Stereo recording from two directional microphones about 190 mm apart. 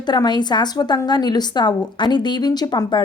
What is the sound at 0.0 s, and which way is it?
Speech, 25° left (ahead or behind).